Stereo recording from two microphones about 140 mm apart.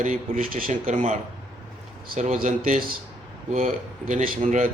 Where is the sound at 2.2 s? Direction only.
65° right (ahead or behind).